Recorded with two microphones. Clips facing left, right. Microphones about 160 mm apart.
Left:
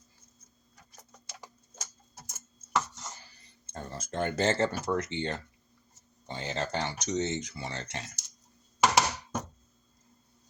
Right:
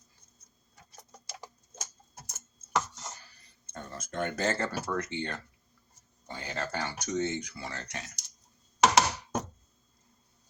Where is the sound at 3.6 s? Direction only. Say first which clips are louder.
Left 2 dB; 30° left (ahead or behind).